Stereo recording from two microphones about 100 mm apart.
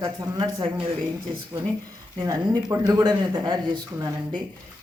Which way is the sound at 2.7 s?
30° right (ahead or behind).